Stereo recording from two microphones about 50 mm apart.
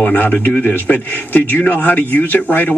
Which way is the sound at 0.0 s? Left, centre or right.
Left.